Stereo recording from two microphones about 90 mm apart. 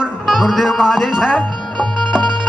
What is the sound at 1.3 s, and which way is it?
Music, 5° left (ahead or behind).